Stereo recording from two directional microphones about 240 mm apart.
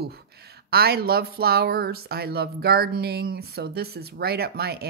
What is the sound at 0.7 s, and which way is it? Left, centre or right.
Speech, right.